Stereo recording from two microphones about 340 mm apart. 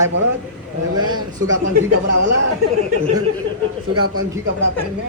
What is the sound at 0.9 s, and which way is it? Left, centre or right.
Speech, centre.